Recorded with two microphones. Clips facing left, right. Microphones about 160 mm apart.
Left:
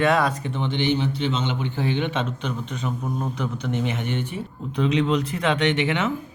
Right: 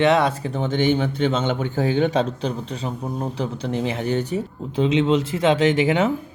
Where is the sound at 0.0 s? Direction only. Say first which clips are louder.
Right 3 dB; 20° right (ahead or behind).